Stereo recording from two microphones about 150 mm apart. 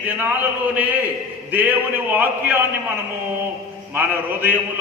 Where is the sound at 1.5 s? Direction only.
10° right (ahead or behind).